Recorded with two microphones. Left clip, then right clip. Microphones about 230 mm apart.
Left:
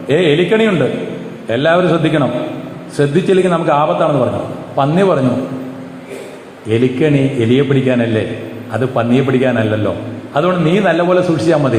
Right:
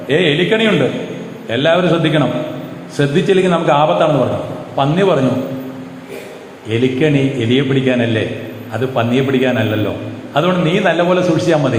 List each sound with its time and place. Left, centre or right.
0.1 s a man's voice: left
6.7 s a man's voice: left